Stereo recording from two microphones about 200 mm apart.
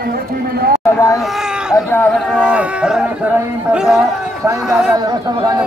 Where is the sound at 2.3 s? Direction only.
5° right (ahead or behind).